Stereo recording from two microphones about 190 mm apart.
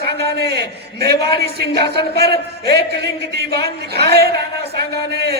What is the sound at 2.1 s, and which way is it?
A man's voice, 55° right (ahead or behind).